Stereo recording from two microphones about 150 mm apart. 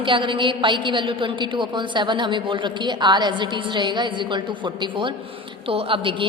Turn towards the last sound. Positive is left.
turn(degrees=-35)  # may be behind; listen again after turning